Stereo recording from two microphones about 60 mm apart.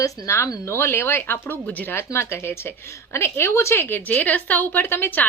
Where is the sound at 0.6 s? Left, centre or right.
Left.